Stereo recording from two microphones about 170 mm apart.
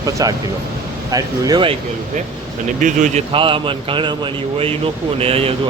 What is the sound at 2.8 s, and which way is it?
Speech, 45° right (ahead or behind).